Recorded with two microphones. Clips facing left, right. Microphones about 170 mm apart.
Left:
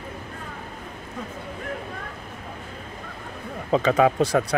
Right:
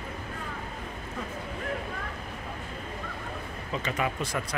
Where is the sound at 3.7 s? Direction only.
85° left.